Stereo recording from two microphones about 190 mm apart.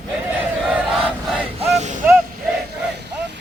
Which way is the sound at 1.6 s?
35° right (ahead or behind).